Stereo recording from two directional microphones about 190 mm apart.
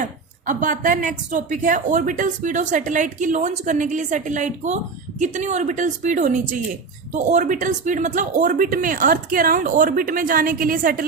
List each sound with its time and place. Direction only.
0.4 s speech: 40° right (ahead or behind)